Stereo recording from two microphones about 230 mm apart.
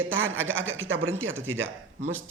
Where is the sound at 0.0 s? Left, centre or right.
Right.